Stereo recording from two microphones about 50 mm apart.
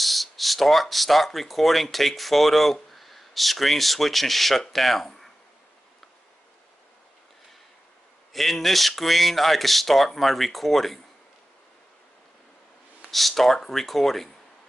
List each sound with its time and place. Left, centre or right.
0.0 s speech: centre
8.3 s speech: centre
13.1 s speech: centre